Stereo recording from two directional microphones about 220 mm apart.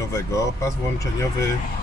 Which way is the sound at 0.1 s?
15° left (ahead or behind).